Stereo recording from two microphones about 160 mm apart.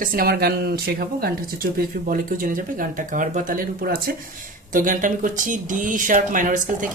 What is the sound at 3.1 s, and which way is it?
Speech, 55° right (ahead or behind).